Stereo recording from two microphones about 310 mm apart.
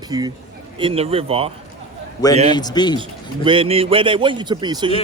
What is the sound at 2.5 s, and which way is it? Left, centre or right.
Speech, centre.